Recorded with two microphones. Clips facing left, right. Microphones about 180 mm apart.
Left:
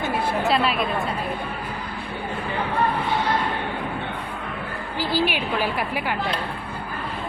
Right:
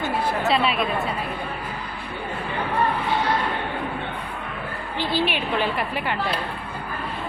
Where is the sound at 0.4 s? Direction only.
Centre (ahead or behind).